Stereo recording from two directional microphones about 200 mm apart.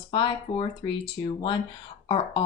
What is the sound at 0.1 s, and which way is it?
Speech, 25° left (ahead or behind).